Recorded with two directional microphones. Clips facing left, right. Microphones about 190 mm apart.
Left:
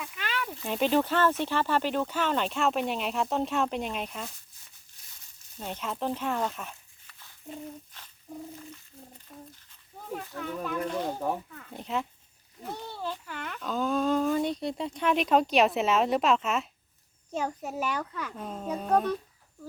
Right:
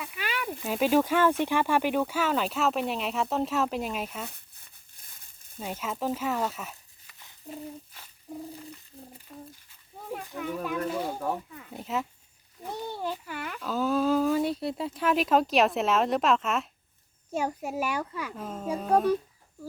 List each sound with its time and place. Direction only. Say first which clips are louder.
0.0 s speech: right 1 dB; 10° right (ahead or behind)
4.3 s crumpling: right 2 dB; 60° right (ahead or behind)
5.5 s speech: right 1 dB; 5° right (ahead or behind)
7.4 s a sound: right 1 dB; 5° right (ahead or behind)
9.3 s speech: right 2 dB; centre (ahead or behind)
10.1 s a child's voice: right 2 dB; 10° right (ahead or behind)
12.8 s a child's voice: right 5 dB; 15° right (ahead or behind)